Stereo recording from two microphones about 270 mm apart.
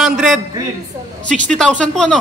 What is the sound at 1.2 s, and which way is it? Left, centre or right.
Speech, right.